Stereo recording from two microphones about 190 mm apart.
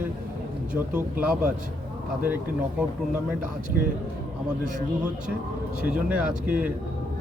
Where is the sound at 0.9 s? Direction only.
5° right (ahead or behind).